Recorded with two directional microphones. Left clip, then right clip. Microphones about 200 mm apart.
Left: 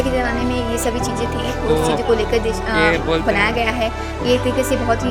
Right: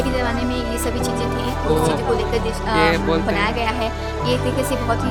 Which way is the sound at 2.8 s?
Centre (ahead or behind).